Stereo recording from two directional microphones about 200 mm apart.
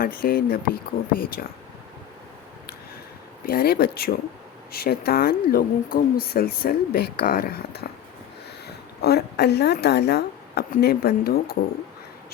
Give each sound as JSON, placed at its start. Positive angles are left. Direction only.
{"t": 0.0, "sound": "speech", "side_deg": 45}
{"t": 3.4, "sound": "speech", "side_deg": 50}